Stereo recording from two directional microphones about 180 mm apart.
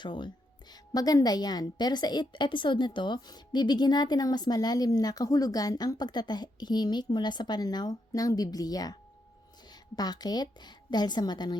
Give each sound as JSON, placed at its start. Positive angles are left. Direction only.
{"t": 0.0, "sound": "a woman's voice", "side_deg": 25}